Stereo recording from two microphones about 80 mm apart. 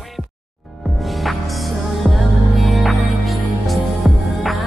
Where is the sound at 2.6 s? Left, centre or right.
Centre.